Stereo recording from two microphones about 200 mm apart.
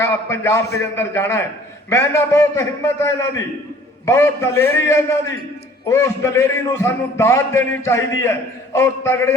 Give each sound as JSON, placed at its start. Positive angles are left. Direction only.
{"t": 0.0, "sound": "a man's voice", "side_deg": 15}